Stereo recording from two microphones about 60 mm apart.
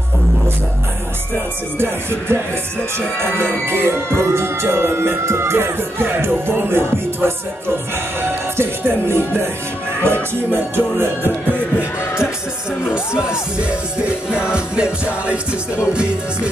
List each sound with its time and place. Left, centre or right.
1.3 s music: right
3.6 s music: right
11.5 s music: left
12.9 s music: centre